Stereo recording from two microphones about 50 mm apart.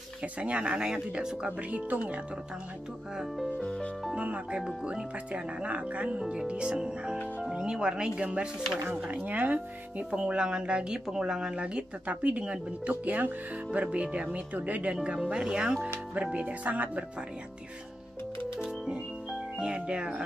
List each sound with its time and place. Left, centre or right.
0.2 s speech: right
1.6 s speech: right
3.2 s speech: centre
3.5 s music: centre
4.2 s speech: right
4.6 s speech: centre
5.3 s speech: right
10.1 s speech: centre
16.2 s speech: right
18.6 s music: centre
19.6 s speech: centre